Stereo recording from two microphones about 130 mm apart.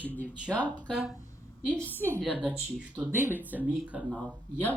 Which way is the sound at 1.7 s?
10° left (ahead or behind).